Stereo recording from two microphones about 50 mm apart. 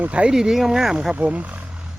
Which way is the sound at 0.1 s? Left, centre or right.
Right.